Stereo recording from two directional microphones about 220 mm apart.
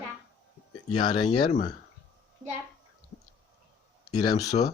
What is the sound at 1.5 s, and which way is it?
Speech, 35° left (ahead or behind).